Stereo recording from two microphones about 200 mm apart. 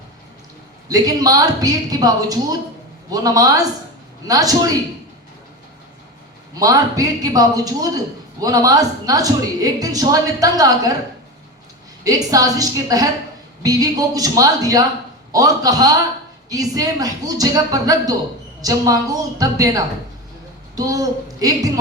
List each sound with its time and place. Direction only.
0.9 s a man's voice: 20° right (ahead or behind)
6.5 s a man's voice: 20° right (ahead or behind)
12.0 s a man's voice: 20° right (ahead or behind)